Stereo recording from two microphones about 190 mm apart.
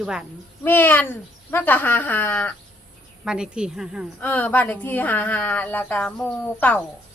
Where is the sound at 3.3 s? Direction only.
5° right (ahead or behind).